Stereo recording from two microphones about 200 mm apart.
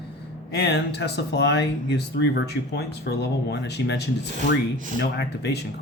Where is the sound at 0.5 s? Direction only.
55° left (ahead or behind).